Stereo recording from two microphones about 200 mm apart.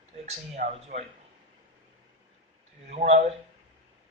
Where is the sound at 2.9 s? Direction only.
35° right (ahead or behind).